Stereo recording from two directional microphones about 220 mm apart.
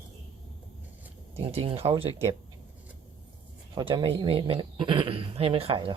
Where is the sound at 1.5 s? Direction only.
25° right (ahead or behind).